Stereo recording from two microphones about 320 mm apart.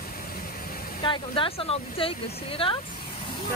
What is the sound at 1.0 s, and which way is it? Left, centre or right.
Speech, centre.